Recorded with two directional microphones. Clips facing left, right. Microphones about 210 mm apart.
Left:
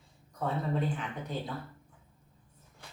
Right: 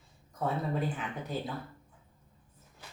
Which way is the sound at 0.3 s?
5° right (ahead or behind).